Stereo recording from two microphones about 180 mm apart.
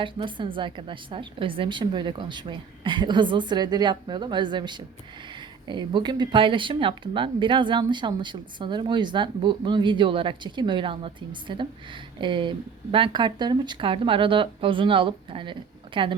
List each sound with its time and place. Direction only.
0.0 s speech: 25° right (ahead or behind)